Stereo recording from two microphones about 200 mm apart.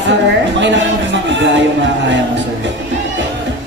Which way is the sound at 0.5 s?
65° right (ahead or behind).